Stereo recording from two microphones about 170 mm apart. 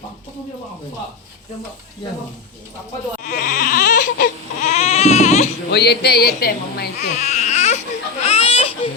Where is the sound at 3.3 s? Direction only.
50° left (ahead or behind).